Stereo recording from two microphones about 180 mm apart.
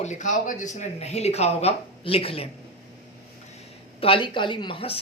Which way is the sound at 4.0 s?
30° left (ahead or behind).